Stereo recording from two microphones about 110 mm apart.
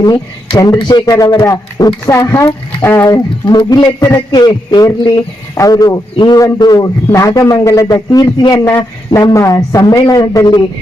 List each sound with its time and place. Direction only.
0.0 s a man's voice: 35° left (ahead or behind)
3.1 s a man's voice: 40° left (ahead or behind)